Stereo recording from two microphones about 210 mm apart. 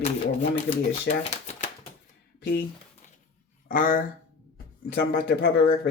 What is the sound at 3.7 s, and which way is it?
Speech, 40° left (ahead or behind).